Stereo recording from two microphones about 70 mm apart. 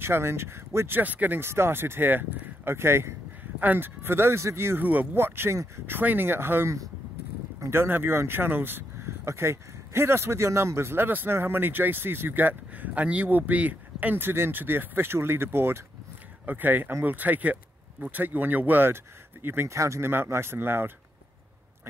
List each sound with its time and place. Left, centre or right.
0.0 s speech: right
2.7 s a sound: right
3.6 s speech: right
7.7 s speech: right
19.7 s speech: right